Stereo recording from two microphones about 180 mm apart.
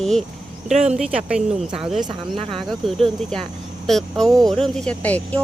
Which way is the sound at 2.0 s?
30° right (ahead or behind).